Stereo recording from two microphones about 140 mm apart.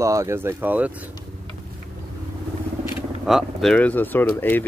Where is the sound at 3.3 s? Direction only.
Centre (ahead or behind).